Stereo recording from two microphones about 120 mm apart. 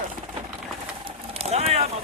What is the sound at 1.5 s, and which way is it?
Vehicle, 60° right (ahead or behind).